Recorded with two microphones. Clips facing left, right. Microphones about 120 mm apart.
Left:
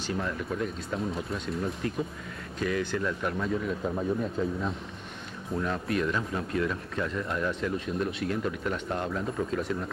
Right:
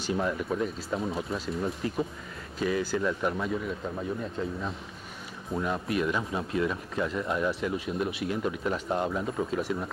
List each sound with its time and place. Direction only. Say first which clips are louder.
0.0 s speech: right 3 dB; 20° right (ahead or behind)
0.6 s speech: right 1 dB; 5° right (ahead or behind)